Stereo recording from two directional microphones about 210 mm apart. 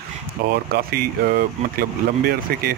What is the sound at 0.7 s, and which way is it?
Speech, 45° right (ahead or behind).